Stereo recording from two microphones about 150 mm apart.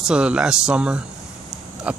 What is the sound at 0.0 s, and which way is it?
Speech, 5° right (ahead or behind).